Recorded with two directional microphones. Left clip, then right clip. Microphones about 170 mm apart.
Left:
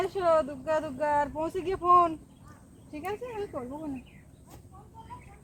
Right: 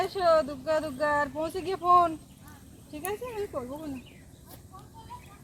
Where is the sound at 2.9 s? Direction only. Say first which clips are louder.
Right 1 dB; 30° right (ahead or behind).